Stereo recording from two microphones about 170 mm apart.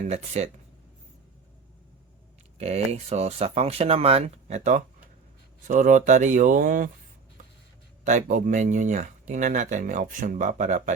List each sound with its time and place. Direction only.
0.0 s speech: 40° right (ahead or behind)
2.6 s speech: 40° right (ahead or behind)
8.0 s speech: 50° right (ahead or behind)